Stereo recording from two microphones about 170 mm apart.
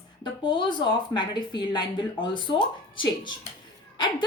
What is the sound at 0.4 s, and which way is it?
A woman's voice, 25° left (ahead or behind).